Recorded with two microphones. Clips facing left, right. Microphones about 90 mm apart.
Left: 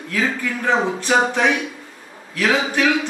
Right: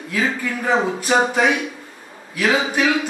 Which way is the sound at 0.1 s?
10° right (ahead or behind).